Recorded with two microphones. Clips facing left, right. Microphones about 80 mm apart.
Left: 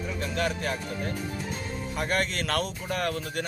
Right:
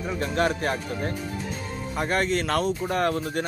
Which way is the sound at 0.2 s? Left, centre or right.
Right.